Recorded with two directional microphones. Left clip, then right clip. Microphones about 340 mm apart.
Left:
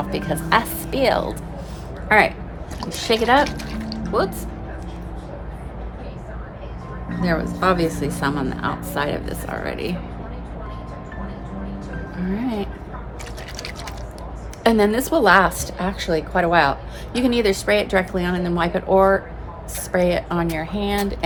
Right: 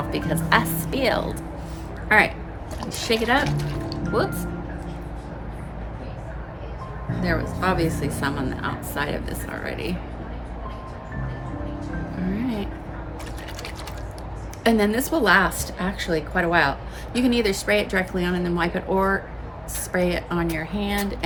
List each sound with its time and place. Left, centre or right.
0.1 s a woman's voice: centre
3.7 s music: centre
7.2 s a woman's voice: centre
12.2 s a woman's voice: centre
14.6 s a woman's voice: centre